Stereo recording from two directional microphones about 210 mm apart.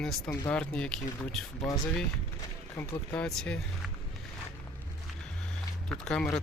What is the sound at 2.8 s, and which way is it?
Speech, 10° left (ahead or behind).